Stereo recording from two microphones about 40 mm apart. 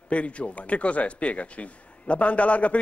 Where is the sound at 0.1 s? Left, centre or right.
Left.